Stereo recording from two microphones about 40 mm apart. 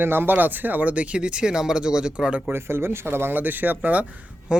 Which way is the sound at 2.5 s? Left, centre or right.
Right.